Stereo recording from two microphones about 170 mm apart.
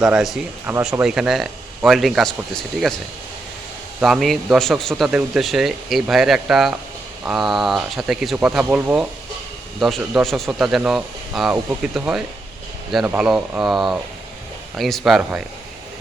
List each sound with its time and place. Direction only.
0.0 s a man's voice: centre (ahead or behind)
0.6 s a man's voice: 15° right (ahead or behind)
4.0 s a man's voice: centre (ahead or behind)